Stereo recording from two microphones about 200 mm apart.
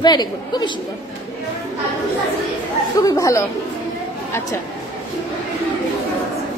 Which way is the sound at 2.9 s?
15° left (ahead or behind).